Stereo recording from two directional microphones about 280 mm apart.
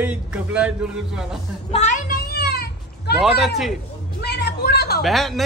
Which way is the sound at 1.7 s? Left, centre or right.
Left.